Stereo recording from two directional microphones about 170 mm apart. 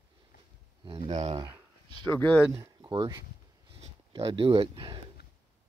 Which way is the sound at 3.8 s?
35° right (ahead or behind).